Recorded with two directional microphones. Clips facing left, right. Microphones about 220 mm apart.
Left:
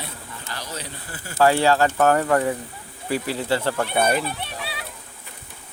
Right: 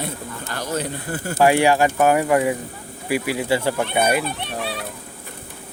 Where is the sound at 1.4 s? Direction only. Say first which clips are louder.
Right 2 dB; 15° right (ahead or behind).